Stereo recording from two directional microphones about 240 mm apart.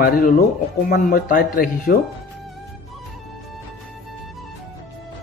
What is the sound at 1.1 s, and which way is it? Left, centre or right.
Speech, left.